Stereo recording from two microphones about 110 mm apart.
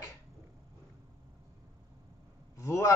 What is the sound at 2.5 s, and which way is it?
Speech, 25° left (ahead or behind).